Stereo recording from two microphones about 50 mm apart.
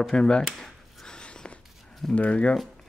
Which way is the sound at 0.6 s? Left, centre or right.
Centre.